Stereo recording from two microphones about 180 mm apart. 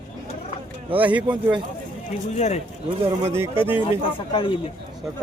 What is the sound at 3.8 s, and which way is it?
Speech, 30° left (ahead or behind).